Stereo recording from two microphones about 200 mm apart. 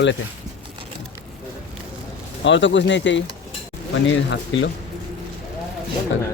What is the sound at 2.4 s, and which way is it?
Speech, 65° left (ahead or behind).